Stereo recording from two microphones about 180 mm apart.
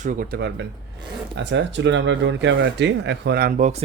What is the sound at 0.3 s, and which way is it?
Speech, 75° right (ahead or behind).